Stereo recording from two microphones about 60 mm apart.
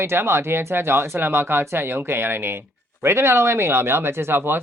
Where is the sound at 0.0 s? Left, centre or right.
Right.